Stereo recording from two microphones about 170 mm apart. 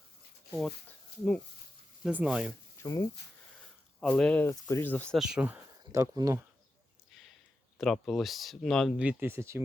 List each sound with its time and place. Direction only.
0.5 s speech: 5° left (ahead or behind)
2.0 s speech: 5° right (ahead or behind)
2.8 s speech: 20° left (ahead or behind)
4.0 s speech: 5° left (ahead or behind); by 6.4 s 20° right (ahead or behind)
7.8 s speech: centre (ahead or behind)
9.0 s speech: 10° right (ahead or behind)